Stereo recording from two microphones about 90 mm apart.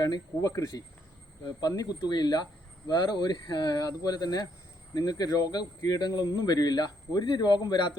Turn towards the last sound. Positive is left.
turn(degrees=55)  # may be behind; listen again after turning